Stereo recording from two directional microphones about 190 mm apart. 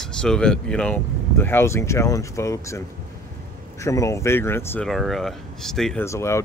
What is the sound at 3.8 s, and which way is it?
Speech, 15° left (ahead or behind).